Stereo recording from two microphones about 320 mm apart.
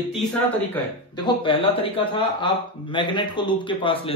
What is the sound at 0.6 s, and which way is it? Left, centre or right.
Speech, centre.